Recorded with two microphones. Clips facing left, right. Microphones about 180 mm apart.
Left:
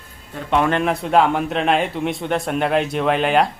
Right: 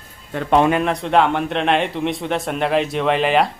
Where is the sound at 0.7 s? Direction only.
Centre (ahead or behind).